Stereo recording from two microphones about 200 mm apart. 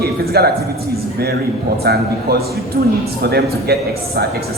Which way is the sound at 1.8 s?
50° right (ahead or behind).